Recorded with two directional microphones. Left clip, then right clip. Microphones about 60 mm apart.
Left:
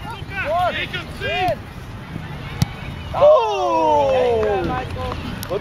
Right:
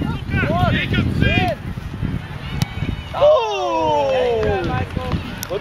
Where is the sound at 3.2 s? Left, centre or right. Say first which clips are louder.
Left 1 dB; right.